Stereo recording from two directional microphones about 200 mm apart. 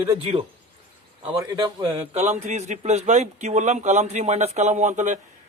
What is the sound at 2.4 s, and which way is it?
Speech, 35° right (ahead or behind).